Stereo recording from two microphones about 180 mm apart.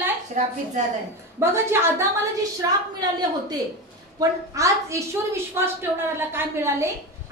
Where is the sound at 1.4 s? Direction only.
15° right (ahead or behind).